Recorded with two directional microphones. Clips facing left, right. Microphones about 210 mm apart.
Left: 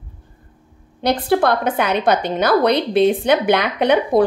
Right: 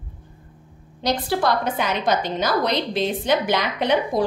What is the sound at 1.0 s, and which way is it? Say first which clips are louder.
A woman's voice: left 6 dB; 55° left (ahead or behind).